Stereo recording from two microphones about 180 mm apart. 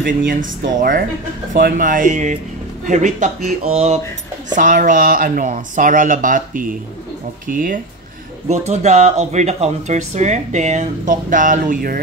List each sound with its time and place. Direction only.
0.3 s speech: 50° right (ahead or behind)
8.5 s speech: 40° right (ahead or behind)